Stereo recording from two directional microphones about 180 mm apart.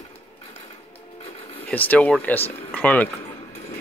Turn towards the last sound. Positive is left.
turn(degrees=10)  # may be behind; listen again after turning